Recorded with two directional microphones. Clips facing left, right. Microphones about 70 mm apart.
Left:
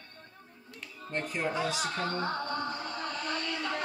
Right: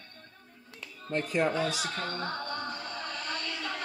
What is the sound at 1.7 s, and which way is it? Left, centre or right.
Music, centre.